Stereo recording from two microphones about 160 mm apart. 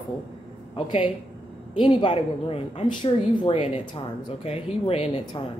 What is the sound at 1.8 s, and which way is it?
Speech, 30° left (ahead or behind).